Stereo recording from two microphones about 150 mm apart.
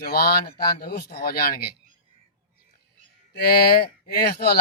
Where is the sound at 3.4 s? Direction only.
90° left.